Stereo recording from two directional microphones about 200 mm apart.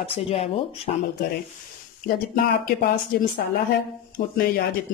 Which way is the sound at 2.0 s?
50° left (ahead or behind).